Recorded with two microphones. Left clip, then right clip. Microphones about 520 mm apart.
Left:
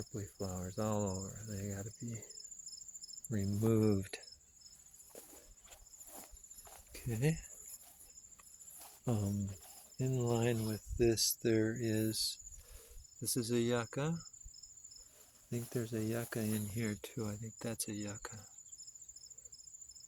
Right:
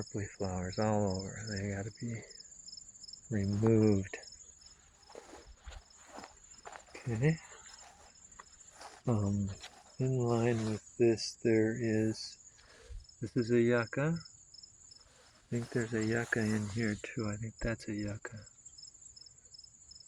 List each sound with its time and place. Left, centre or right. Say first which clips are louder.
0.0 s cricket: right 5 dB; left
5.7 s a sound: right 5 dB; left
6.9 s speech: right 3 dB; left
8.4 s insect: right 11 dB; left
9.0 s speech: right 4 dB; left
10.0 s cricket: right 3 dB; left
15.7 s cricket: right 6 dB; left